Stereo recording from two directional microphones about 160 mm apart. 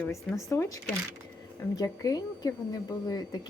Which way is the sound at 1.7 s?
20° left (ahead or behind).